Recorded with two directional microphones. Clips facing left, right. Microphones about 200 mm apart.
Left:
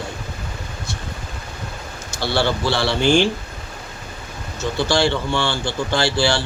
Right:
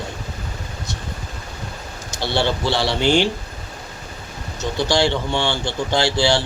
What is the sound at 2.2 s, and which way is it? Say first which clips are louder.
Speech: left 1 dB; 20° right (ahead or behind).